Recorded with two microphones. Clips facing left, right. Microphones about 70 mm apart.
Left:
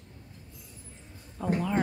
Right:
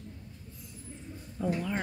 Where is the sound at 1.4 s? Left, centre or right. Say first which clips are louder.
Left 1 dB; centre.